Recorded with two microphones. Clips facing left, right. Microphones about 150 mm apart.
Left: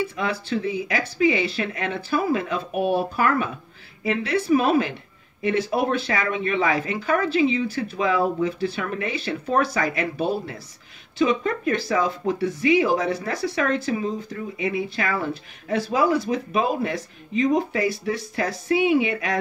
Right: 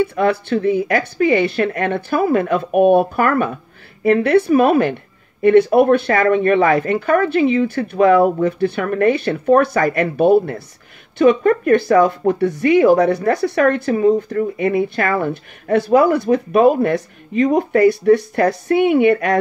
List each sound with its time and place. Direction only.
0.0 s speech: 60° right (ahead or behind)